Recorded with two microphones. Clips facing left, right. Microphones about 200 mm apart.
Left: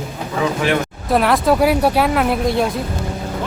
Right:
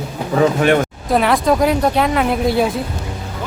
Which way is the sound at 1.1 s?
Centre (ahead or behind).